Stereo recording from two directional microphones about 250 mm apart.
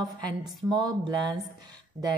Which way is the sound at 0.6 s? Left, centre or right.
Centre.